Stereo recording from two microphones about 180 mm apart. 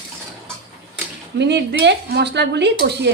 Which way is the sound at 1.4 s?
75° right (ahead or behind).